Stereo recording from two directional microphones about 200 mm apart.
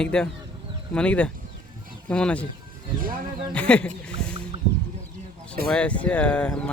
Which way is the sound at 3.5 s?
5° left (ahead or behind).